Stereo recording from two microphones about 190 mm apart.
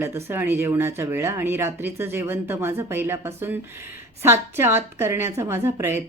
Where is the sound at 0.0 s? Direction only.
10° right (ahead or behind).